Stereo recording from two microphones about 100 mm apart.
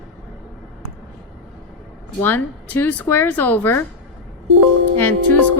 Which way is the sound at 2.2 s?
20° left (ahead or behind).